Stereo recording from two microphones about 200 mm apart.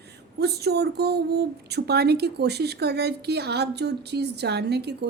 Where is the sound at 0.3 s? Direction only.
55° right (ahead or behind).